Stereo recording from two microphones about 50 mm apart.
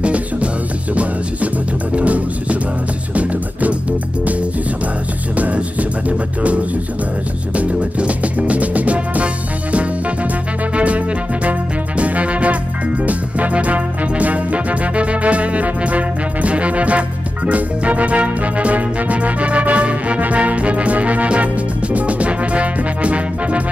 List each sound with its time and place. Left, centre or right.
0.0 s music: right
2.0 s music: right
5.3 s music: right
12.0 s music: right